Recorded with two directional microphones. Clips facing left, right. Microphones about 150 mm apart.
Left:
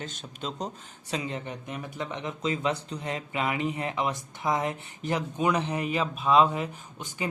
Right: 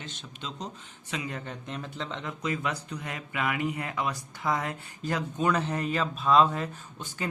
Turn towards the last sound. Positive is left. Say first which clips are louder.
# left 1 dB
turn(degrees=15)  # may be behind; listen again after turning